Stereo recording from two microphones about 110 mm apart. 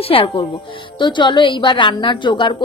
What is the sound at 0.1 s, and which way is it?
A woman's voice, 55° left (ahead or behind).